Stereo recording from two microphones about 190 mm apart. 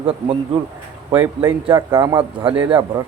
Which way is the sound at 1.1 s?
10° right (ahead or behind).